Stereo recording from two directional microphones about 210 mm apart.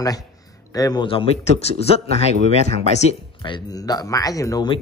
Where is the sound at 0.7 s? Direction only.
20° left (ahead or behind).